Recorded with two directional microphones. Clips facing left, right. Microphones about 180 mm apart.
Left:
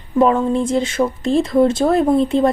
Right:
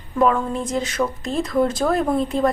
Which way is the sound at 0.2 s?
30° left (ahead or behind).